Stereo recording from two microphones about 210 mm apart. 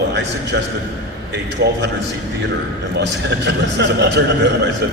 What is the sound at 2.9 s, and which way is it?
A man's voice, 55° right (ahead or behind).